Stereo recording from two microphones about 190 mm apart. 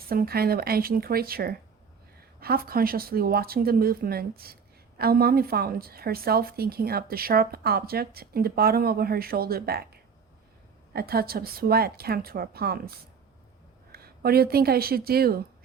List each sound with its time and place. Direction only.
0.1 s a woman's voice: 55° right (ahead or behind)
13.9 s speech: 55° right (ahead or behind)